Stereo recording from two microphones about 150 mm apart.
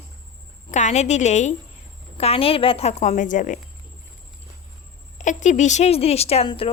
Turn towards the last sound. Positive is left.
turn(degrees=40)  # may be behind; listen again after turning